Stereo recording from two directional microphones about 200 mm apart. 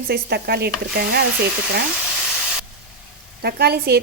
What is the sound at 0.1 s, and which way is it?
Speech, 55° right (ahead or behind).